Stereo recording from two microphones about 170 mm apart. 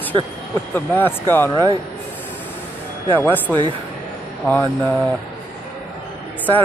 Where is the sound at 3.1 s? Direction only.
10° left (ahead or behind).